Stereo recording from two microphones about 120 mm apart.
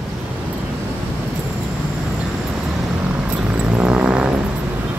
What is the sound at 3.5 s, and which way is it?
Vehicle, 5° right (ahead or behind).